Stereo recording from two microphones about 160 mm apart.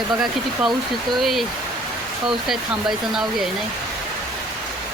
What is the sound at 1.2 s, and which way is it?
Speech, centre (ahead or behind).